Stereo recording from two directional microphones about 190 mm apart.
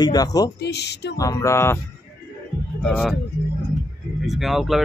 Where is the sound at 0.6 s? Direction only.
60° left (ahead or behind).